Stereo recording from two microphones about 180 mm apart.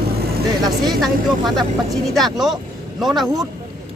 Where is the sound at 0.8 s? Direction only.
Centre (ahead or behind).